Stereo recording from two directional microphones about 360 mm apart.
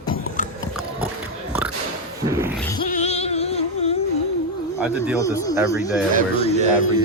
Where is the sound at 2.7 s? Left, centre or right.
Centre.